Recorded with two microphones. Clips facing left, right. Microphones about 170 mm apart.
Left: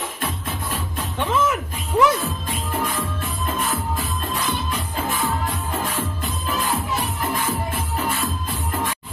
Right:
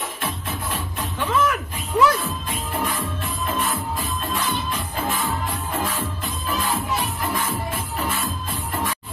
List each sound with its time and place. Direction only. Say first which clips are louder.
1.3 s music: even; 20° left (ahead or behind)